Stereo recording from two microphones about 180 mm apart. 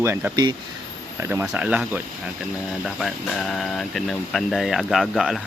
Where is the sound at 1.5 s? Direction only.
5° right (ahead or behind).